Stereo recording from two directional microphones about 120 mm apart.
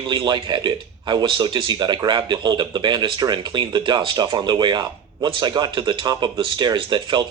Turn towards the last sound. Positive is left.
turn(degrees=-35)  # may be behind; listen again after turning